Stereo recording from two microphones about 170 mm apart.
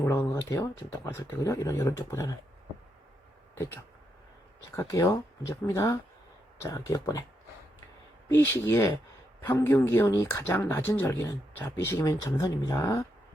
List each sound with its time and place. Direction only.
0.0 s speech: 15° left (ahead or behind)
3.5 s speech: 15° left (ahead or behind)
8.3 s speech: 15° left (ahead or behind)